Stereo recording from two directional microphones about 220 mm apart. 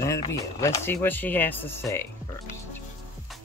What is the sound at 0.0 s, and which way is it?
Speech, 15° left (ahead or behind).